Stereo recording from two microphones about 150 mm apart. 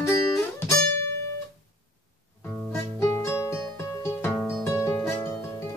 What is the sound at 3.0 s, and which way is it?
Music, 15° left (ahead or behind).